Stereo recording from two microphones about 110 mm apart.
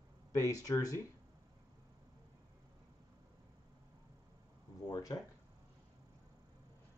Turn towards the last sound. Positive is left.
turn(degrees=30)  # may be behind; listen again after turning